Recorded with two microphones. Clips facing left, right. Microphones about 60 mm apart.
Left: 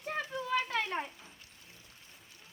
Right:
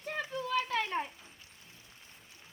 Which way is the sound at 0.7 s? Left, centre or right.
Centre.